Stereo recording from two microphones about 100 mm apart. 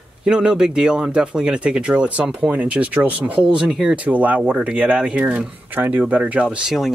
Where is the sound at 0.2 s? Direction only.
10° right (ahead or behind).